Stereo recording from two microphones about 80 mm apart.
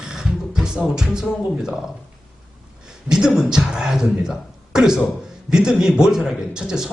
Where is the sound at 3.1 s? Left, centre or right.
Centre.